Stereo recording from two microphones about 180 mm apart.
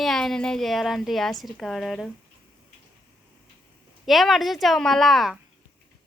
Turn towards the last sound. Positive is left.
turn(degrees=0)  # may be behind; listen again after turning